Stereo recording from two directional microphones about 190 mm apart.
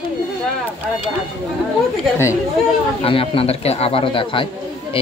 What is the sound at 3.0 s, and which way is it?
Speech, 30° left (ahead or behind).